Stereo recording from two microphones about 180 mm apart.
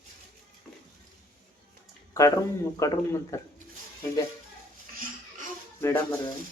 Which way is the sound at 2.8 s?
15° left (ahead or behind).